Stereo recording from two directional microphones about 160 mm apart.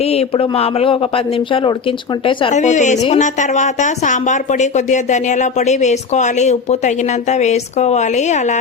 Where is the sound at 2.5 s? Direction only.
50° left (ahead or behind).